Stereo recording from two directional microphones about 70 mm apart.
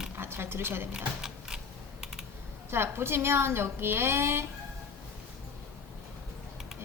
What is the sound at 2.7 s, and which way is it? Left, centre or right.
A woman's voice, right.